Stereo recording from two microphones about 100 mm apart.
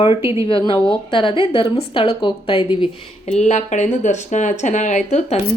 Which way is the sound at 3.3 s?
90° left.